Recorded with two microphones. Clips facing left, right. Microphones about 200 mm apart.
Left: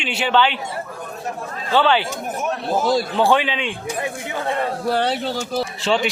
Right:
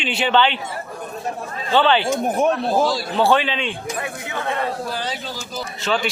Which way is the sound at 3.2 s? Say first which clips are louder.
Right 4 dB; 15° left (ahead or behind).